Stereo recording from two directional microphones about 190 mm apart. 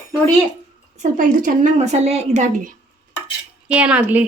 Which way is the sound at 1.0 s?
45° right (ahead or behind).